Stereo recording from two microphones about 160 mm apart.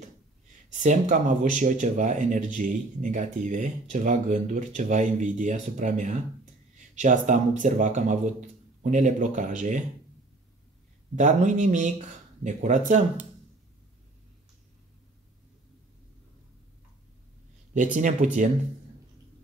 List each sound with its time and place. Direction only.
0.7 s speech: 50° right (ahead or behind)
11.1 s speech: 50° right (ahead or behind)
17.9 s speech: 50° right (ahead or behind)